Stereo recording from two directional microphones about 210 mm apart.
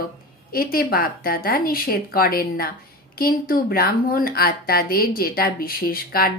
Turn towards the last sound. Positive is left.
turn(degrees=45)  # may be behind; listen again after turning